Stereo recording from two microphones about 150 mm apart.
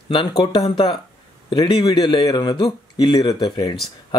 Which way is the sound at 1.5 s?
30° left (ahead or behind).